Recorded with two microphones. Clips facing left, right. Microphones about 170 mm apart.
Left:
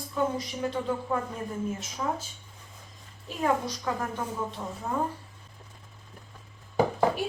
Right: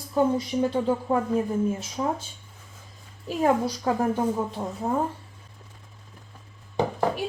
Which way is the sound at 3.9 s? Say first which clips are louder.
Right 9 dB; 30° right (ahead or behind).